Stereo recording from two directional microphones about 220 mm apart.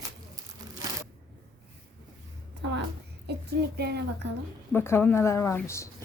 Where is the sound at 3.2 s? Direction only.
50° right (ahead or behind).